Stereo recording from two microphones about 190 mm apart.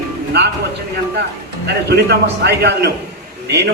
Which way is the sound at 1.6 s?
60° right (ahead or behind).